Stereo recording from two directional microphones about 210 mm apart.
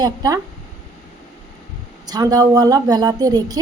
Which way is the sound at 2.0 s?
20° right (ahead or behind).